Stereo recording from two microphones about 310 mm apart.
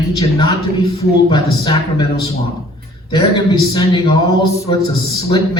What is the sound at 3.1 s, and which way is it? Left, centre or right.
A man's voice, centre.